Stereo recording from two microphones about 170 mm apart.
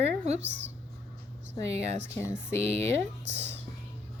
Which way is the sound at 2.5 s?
35° right (ahead or behind).